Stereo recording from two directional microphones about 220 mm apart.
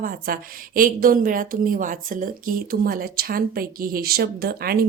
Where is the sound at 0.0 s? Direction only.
40° right (ahead or behind).